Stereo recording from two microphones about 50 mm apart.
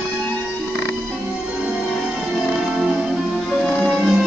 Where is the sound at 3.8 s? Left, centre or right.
Centre.